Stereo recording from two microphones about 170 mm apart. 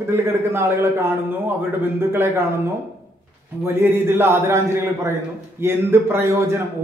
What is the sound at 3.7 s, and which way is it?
Speech, 15° right (ahead or behind).